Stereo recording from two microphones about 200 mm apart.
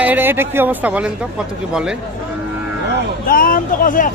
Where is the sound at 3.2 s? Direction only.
45° left (ahead or behind).